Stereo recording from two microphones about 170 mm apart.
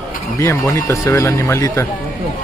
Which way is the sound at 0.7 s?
20° left (ahead or behind).